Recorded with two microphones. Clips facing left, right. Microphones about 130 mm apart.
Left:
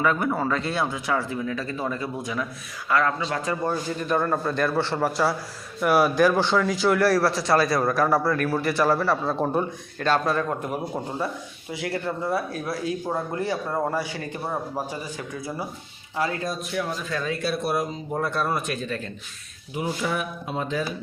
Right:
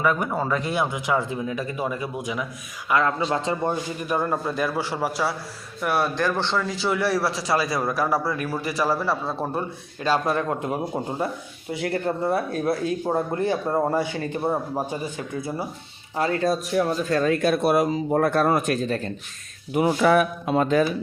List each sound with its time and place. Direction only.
0.0 s a man's voice: 10° right (ahead or behind)
10.2 s a man's voice: 25° right (ahead or behind)
12.1 s speech: 30° right (ahead or behind)
13.1 s a man's voice: 20° right (ahead or behind)
16.1 s speech: 35° right (ahead or behind)
19.7 s speech: 70° right (ahead or behind)